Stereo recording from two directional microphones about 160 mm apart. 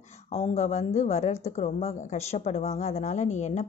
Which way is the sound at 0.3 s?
40° left (ahead or behind).